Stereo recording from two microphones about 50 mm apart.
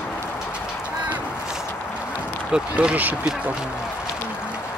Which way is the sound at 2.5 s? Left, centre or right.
Centre.